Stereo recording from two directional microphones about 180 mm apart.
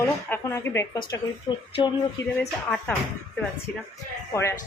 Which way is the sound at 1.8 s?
25° left (ahead or behind).